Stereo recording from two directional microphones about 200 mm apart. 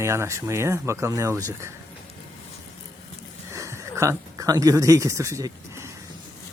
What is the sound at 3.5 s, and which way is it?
Speech, 15° right (ahead or behind).